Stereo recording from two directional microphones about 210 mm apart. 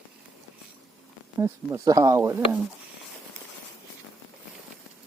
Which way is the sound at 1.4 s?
15° right (ahead or behind).